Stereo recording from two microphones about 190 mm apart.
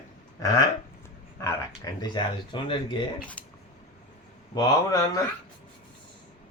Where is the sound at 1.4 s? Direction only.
15° left (ahead or behind).